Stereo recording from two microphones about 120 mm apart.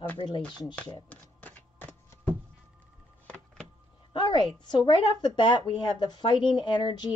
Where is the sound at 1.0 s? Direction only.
15° left (ahead or behind).